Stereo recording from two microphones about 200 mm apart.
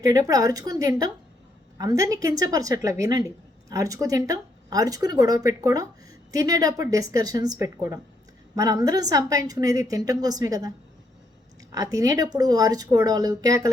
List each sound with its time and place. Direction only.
0.0 s speech: 20° right (ahead or behind)
11.7 s speech: 20° right (ahead or behind)